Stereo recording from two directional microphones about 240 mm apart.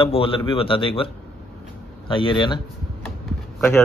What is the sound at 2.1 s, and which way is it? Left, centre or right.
A man's voice, left.